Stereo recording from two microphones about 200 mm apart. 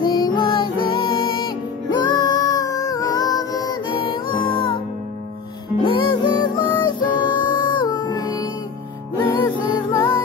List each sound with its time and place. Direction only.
0.0 s music: 20° left (ahead or behind)
5.9 s music: 25° left (ahead or behind)